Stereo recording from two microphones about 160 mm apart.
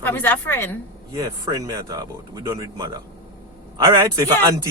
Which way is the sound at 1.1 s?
20° right (ahead or behind).